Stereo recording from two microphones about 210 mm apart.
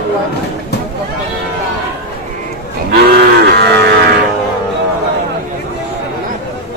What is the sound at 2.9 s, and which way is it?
Cattle, 50° right (ahead or behind).